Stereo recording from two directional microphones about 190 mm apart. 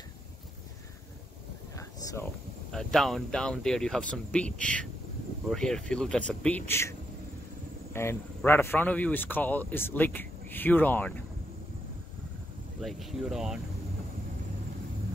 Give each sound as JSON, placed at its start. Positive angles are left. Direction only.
{"t": 1.8, "sound": "a sound", "side_deg": 15}
{"t": 2.7, "sound": "speech", "side_deg": 0}
{"t": 12.8, "sound": "speech", "side_deg": 0}